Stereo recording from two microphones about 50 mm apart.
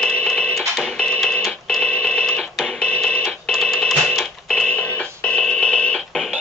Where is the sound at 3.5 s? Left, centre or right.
Centre.